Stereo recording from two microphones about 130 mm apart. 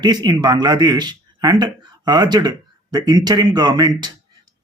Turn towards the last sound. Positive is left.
turn(degrees=-30)  # may be behind; listen again after turning